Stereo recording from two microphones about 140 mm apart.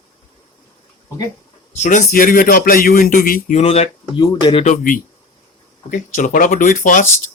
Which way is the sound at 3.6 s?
50° left (ahead or behind).